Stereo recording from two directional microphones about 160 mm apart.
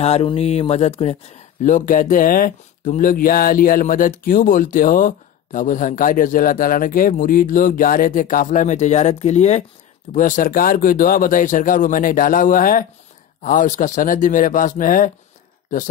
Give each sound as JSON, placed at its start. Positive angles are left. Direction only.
{"t": 0.0, "sound": "speech", "side_deg": 35}
{"t": 10.1, "sound": "speech", "side_deg": 55}